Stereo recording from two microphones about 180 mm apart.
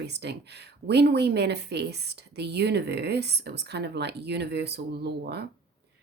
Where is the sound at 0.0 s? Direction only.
70° right (ahead or behind).